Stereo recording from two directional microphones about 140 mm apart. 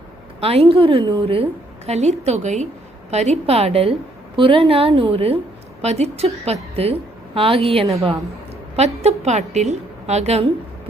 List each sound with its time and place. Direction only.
0.3 s a woman's voice: 45° right (ahead or behind)